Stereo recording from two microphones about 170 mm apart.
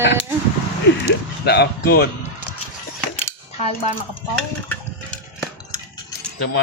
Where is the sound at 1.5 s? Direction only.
80° left.